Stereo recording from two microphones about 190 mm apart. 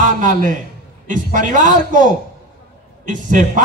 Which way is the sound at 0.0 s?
40° right (ahead or behind).